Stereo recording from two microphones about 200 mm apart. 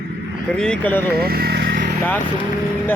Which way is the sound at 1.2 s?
50° right (ahead or behind).